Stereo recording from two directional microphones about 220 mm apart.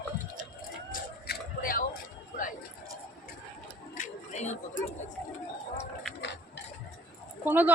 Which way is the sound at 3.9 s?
35° left (ahead or behind).